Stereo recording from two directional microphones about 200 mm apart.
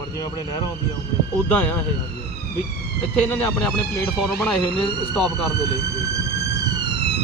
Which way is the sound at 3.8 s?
5° left (ahead or behind).